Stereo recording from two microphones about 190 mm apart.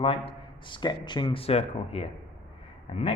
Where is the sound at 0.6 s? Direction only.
25° left (ahead or behind).